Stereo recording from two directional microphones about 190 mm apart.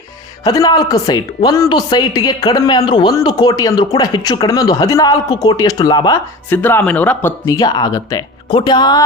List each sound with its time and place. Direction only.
0.4 s speech: 20° left (ahead or behind)
6.5 s speech: 10° left (ahead or behind)